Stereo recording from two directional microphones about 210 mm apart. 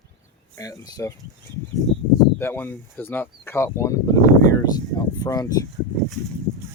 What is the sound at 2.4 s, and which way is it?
Speech, 10° left (ahead or behind).